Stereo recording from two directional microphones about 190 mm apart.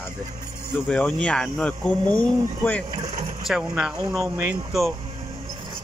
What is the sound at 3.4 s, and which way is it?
Speech, 5° right (ahead or behind).